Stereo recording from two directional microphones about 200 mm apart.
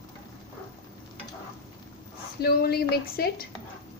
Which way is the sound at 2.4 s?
50° left (ahead or behind).